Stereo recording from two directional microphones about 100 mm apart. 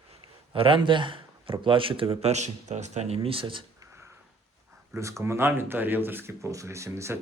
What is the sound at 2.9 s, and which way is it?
Speech, 90° right.